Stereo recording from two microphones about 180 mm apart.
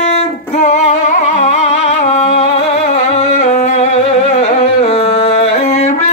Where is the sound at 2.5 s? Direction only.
40° left (ahead or behind).